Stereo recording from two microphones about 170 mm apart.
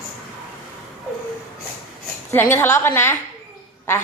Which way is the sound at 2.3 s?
15° left (ahead or behind).